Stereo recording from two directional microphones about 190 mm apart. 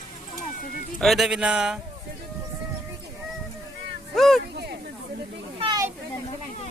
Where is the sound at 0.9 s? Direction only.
Centre (ahead or behind).